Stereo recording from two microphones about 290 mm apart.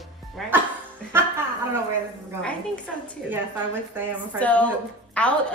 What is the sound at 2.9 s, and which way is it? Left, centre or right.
Speech, centre.